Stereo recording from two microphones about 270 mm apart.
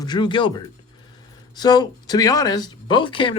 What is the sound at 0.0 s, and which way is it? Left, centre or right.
A man's voice, centre.